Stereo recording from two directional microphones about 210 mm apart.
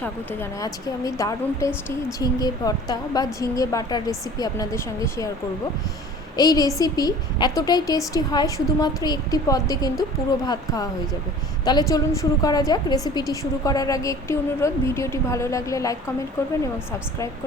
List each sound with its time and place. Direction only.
0.6 s a woman's voice: 15° left (ahead or behind)
6.3 s a woman's voice: 20° left (ahead or behind)